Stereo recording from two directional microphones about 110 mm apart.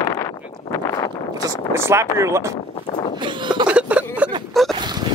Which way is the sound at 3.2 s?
45° right (ahead or behind).